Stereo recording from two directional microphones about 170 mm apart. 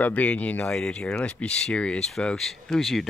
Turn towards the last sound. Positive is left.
turn(degrees=0)  # may be behind; listen again after turning